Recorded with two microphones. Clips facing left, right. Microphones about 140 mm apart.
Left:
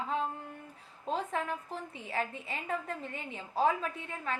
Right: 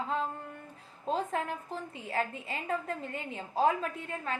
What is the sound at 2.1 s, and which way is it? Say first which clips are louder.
A woman's voice: right 2 dB; 40° right (ahead or behind).